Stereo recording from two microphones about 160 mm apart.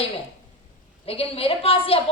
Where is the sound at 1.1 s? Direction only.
35° left (ahead or behind).